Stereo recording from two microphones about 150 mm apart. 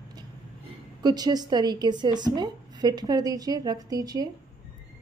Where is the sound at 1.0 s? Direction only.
25° right (ahead or behind).